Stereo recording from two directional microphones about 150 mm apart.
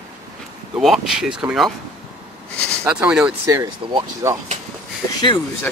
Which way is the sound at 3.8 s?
30° right (ahead or behind).